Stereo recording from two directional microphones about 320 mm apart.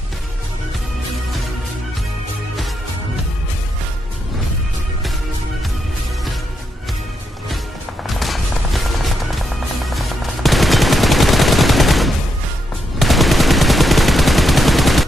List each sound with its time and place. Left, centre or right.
8.1 s music: centre
13.0 s gunshot: centre